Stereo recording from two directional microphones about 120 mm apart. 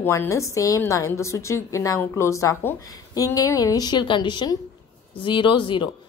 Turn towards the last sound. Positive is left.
turn(degrees=40)  # may be behind; listen again after turning